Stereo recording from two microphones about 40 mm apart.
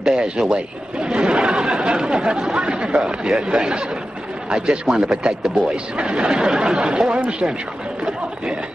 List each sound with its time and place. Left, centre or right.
0.0 s speech: right
2.6 s a man's voice: right